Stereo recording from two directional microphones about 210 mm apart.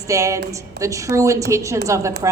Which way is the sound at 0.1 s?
15° right (ahead or behind).